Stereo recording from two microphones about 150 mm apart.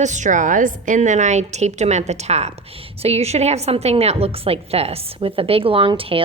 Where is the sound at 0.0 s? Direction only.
55° right (ahead or behind).